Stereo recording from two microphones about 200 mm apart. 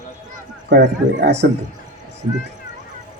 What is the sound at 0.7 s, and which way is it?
Speech, 60° right (ahead or behind).